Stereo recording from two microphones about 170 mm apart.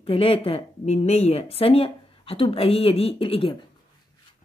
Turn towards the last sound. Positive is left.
turn(degrees=30)  # may be behind; listen again after turning